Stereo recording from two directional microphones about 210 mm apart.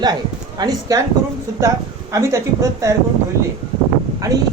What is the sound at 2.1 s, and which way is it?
Speech, 15° right (ahead or behind).